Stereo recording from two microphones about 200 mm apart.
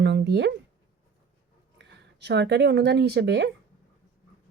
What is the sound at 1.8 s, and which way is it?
Speech, 60° right (ahead or behind).